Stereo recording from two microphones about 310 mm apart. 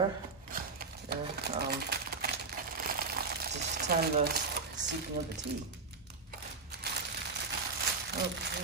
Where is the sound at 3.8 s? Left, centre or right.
Right.